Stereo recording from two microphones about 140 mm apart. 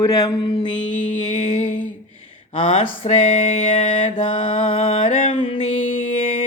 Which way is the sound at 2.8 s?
55° left (ahead or behind).